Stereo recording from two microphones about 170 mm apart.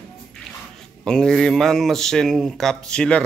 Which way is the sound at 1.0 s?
5° left (ahead or behind).